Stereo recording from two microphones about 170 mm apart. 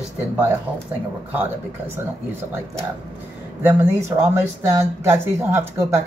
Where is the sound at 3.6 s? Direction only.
15° right (ahead or behind).